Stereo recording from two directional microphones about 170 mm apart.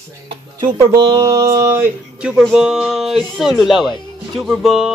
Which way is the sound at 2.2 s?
Centre (ahead or behind).